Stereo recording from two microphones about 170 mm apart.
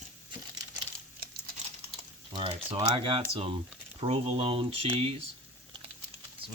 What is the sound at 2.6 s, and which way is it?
Speech, 20° right (ahead or behind).